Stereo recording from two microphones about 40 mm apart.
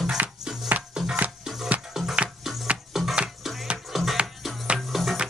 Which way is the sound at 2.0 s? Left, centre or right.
Right.